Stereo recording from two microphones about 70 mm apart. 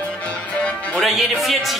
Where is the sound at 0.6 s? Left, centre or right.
Centre.